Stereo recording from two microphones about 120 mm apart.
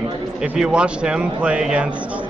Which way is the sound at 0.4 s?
5° right (ahead or behind).